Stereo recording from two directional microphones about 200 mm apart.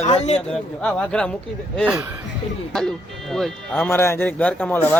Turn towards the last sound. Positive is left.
turn(degrees=10)  # may be behind; listen again after turning